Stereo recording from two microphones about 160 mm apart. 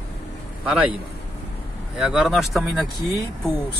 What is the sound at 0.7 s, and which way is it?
Speech, 5° right (ahead or behind).